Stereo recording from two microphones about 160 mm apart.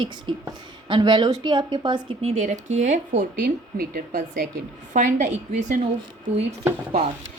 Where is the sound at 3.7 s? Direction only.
65° right (ahead or behind).